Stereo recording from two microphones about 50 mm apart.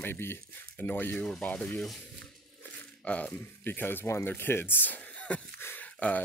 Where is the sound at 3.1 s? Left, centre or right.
Left.